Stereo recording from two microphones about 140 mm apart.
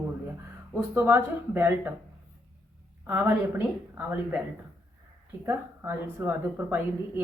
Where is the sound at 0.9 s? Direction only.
15° right (ahead or behind).